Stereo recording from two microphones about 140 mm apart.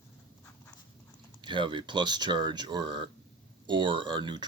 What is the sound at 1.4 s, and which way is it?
Speech, 35° right (ahead or behind).